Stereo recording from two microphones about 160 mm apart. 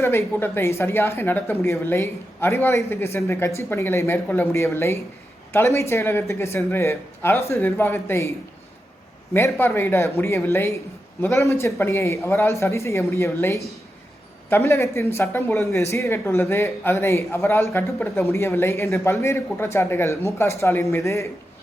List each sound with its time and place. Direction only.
0.0 s a man's voice: 15° left (ahead or behind)
9.3 s a man's voice: 15° left (ahead or behind)